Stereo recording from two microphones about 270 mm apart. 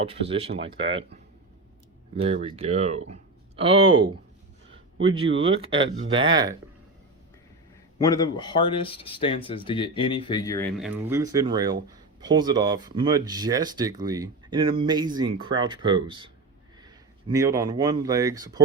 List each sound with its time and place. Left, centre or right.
0.0 s speech: right
2.2 s speech: right
6.1 s speech: centre
7.9 s speech: centre
10.8 s speech: centre